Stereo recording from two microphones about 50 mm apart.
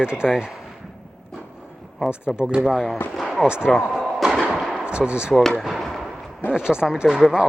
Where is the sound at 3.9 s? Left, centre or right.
Centre.